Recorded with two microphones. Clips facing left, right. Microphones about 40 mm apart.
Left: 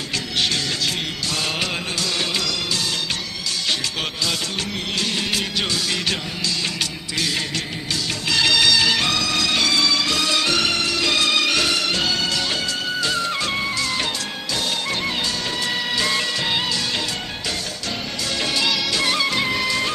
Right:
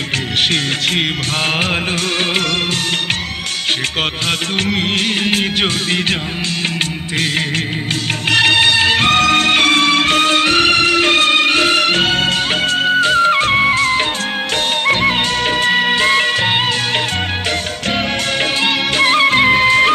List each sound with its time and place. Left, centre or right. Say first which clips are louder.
0.3 s music: right 5 dB; right
4.3 s music: right 8 dB; right
8.3 s music: right 5 dB; right
18.3 s music of bollywood: right 4 dB; right